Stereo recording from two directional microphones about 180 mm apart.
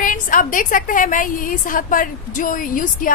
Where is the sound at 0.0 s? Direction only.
45° left (ahead or behind).